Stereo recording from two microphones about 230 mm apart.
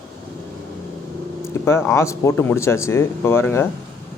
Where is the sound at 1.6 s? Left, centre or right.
Centre.